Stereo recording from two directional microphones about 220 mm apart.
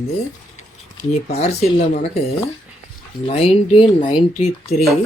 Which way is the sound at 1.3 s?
30° left (ahead or behind).